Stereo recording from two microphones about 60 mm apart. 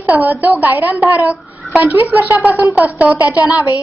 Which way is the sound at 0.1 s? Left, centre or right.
Right.